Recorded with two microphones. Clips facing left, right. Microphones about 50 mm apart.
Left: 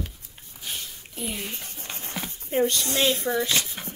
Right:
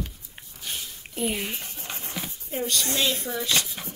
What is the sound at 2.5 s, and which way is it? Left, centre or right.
Speech, left.